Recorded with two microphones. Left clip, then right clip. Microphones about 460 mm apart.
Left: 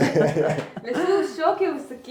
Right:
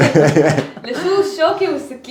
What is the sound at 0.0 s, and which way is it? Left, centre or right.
Speech, right.